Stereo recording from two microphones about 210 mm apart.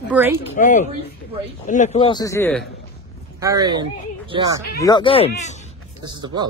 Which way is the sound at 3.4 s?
15° right (ahead or behind).